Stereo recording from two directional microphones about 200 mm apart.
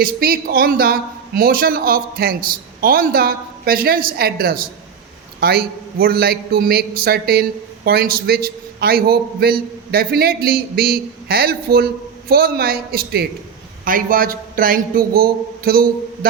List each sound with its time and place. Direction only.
0.0 s a man's voice: 50° right (ahead or behind)